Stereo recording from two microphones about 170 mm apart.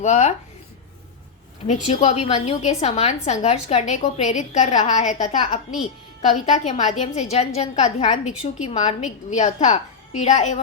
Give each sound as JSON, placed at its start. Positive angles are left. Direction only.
{"t": 0.0, "sound": "a woman's voice", "side_deg": 40}
{"t": 1.6, "sound": "a woman's voice", "side_deg": 45}